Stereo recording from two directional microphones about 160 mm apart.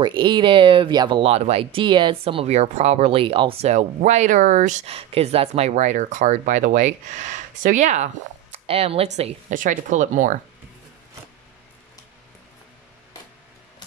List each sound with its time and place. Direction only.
0.0 s speech: 30° right (ahead or behind); by 10.4 s 55° right (ahead or behind)